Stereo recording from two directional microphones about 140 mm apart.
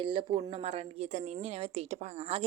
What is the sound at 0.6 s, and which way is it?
Speech, 45° right (ahead or behind).